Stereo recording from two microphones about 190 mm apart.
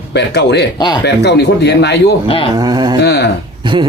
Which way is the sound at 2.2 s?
30° left (ahead or behind).